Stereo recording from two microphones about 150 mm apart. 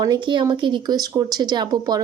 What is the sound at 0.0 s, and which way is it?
Speech, 30° right (ahead or behind).